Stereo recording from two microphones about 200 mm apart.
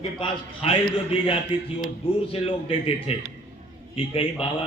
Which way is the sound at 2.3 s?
30° left (ahead or behind).